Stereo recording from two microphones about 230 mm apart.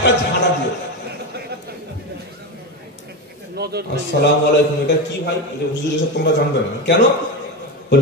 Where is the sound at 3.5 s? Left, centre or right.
Right.